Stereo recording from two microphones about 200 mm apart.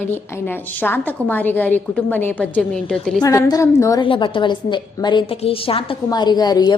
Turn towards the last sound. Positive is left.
turn(degrees=20)  # may be behind; listen again after turning